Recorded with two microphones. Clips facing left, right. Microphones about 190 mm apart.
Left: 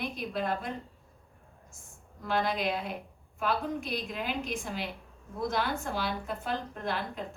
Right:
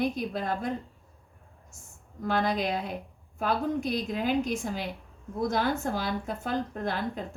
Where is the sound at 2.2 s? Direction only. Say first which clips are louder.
Right 2 dB; 45° right (ahead or behind).